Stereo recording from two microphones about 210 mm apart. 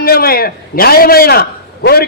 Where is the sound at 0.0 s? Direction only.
45° left (ahead or behind).